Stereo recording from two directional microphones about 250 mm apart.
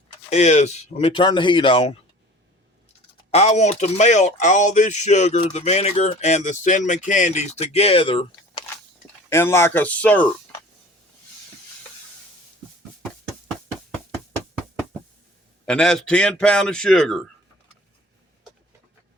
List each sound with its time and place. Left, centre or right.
0.3 s speech: left
3.3 s speech: left; by 10.2 s centre
15.6 s a man's voice: centre